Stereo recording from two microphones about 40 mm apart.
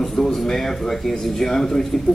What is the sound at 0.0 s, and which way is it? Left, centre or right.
Speech, centre.